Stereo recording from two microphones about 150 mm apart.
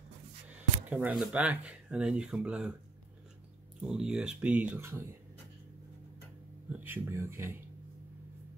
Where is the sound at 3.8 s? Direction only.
5° right (ahead or behind).